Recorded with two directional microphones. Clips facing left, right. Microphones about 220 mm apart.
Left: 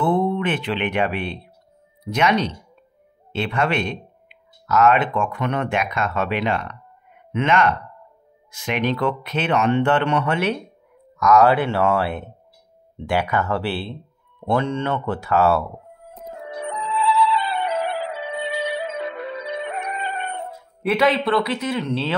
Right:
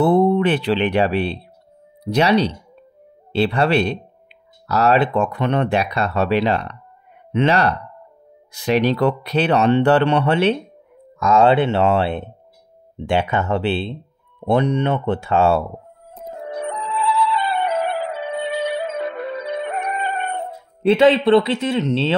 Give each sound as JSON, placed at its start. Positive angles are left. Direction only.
{"t": 0.0, "sound": "speech", "side_deg": -40}
{"t": 16.3, "sound": "music", "side_deg": -35}
{"t": 16.6, "sound": "music", "side_deg": -50}
{"t": 20.8, "sound": "speech", "side_deg": -25}